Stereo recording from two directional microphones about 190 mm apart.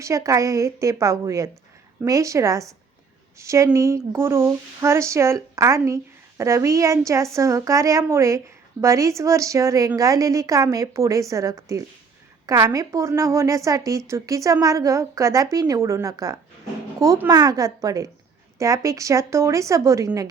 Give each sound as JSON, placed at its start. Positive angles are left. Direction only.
{"t": 0.0, "sound": "speech", "side_deg": -15}